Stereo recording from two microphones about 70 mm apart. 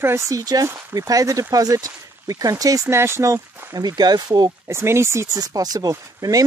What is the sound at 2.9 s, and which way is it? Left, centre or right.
Speech, right.